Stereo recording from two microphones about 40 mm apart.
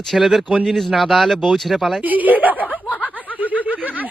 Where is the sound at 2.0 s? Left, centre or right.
Right.